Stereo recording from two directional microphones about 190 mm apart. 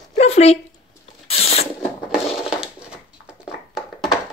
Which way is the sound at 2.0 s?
5° right (ahead or behind).